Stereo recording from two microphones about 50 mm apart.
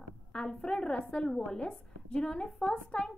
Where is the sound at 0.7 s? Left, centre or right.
Centre.